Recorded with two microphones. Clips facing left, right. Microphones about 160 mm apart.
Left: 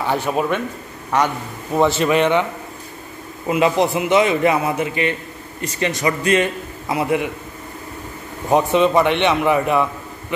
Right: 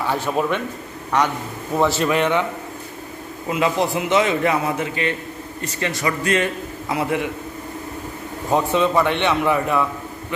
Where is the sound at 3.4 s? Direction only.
20° left (ahead or behind).